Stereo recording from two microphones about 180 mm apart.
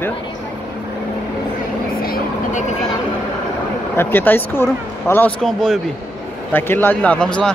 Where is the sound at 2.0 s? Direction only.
55° left (ahead or behind).